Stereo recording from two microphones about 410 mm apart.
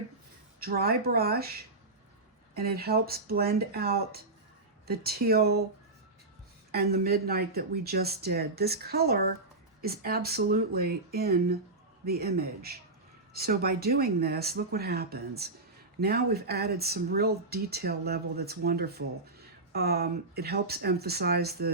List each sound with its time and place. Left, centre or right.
0.6 s speech: right
2.6 s speech: right
6.7 s speech: right